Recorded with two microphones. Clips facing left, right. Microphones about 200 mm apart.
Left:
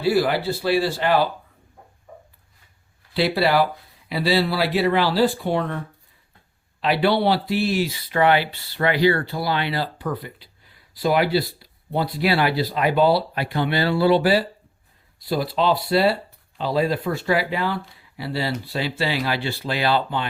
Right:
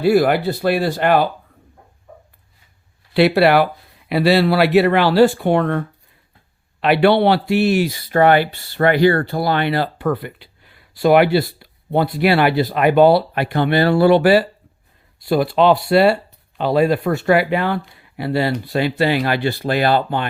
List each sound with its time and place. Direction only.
0.0 s speech: 60° right (ahead or behind)
3.2 s speech: 65° right (ahead or behind)